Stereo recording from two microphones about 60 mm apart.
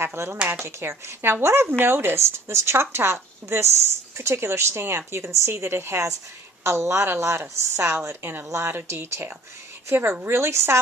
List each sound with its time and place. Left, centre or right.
0.0 s speech: right